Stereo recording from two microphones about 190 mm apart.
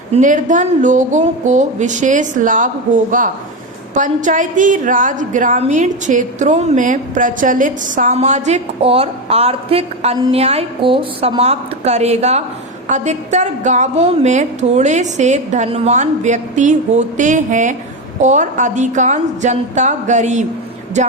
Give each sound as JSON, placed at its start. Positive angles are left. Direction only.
{"t": 0.1, "sound": "a woman's voice", "side_deg": -40}